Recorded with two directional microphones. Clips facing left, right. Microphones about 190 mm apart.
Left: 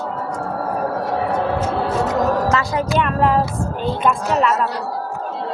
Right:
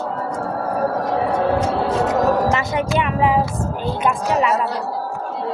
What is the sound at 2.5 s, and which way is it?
Music, 25° right (ahead or behind).